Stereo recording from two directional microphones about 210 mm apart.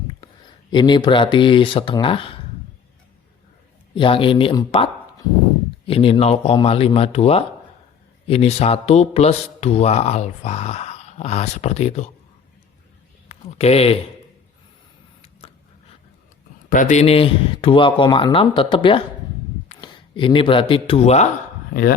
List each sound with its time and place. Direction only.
0.7 s speech: 20° left (ahead or behind)
3.9 s speech: 25° left (ahead or behind)
13.2 s speech: 30° left (ahead or behind)
16.6 s speech: 40° left (ahead or behind)
21.7 s speech: 45° left (ahead or behind)